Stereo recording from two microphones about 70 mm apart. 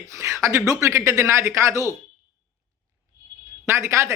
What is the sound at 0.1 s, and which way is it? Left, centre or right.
Speech, right.